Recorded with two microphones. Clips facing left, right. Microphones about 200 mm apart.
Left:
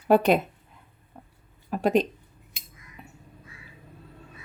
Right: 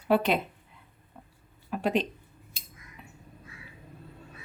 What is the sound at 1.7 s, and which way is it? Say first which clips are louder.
Speech: left 5 dB; 40° left (ahead or behind).